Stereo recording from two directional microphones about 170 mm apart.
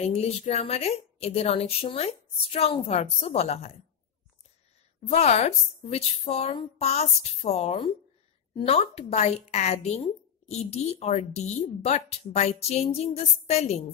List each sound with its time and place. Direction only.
0.0 s a woman's voice: 40° left (ahead or behind)
5.0 s a woman's voice: 40° left (ahead or behind)